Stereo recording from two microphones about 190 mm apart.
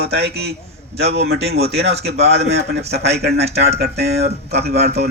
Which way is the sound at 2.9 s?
60° right (ahead or behind).